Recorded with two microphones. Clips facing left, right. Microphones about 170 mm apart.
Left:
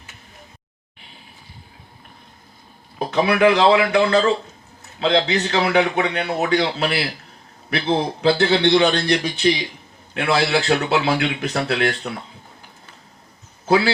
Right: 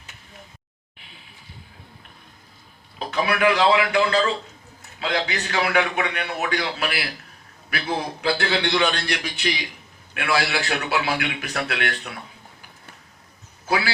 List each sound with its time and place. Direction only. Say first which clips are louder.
3.0 s a man's voice: left 5 dB; 25° left (ahead or behind)
13.7 s a man's voice: left 7 dB; 25° left (ahead or behind)